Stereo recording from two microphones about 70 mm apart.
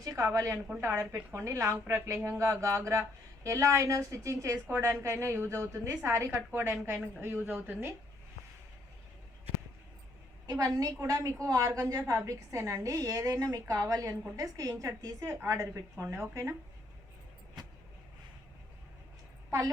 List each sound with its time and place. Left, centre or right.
0.0 s a woman's voice: right
0.3 s a woman's voice: right
10.4 s a woman's voice: right
10.8 s a woman's voice: right